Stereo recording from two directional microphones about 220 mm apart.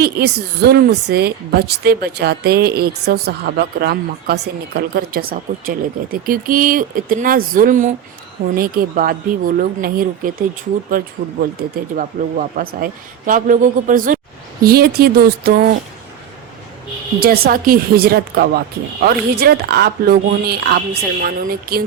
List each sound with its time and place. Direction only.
0.0 s a man's voice: 45° right (ahead or behind)
17.2 s speech: 45° right (ahead or behind)